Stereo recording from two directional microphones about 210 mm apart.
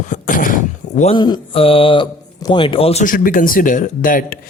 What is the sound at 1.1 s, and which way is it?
Speech, 25° left (ahead or behind).